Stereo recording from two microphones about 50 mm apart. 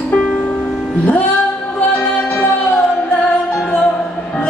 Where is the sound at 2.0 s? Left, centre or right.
Left.